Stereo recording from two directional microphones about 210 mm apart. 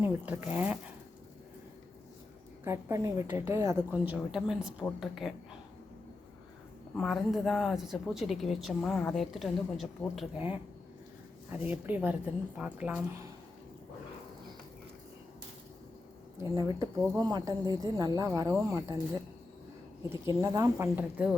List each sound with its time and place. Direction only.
0.0 s a woman's voice: 10° right (ahead or behind)
2.6 s a woman's voice: 15° right (ahead or behind)
6.9 s a woman's voice: centre (ahead or behind)
16.4 s a woman's voice: 15° right (ahead or behind)
20.1 s a woman's voice: 15° right (ahead or behind)